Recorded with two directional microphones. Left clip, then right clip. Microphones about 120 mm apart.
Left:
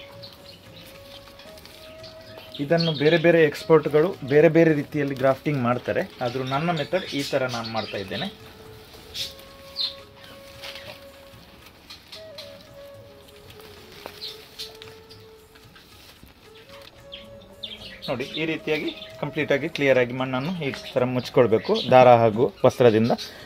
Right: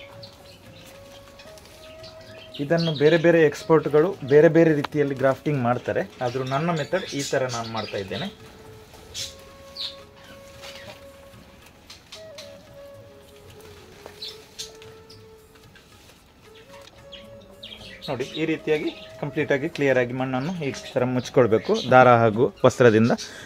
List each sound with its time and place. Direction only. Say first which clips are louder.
2.7 s speech: left 1 dB; 15° right (ahead or behind)
3.0 s speech: right 1 dB; 30° right (ahead or behind)
5.7 s speech: even; 10° right (ahead or behind)
17.6 s speech: left 4 dB; 20° right (ahead or behind)
21.5 s speech: even; 40° right (ahead or behind)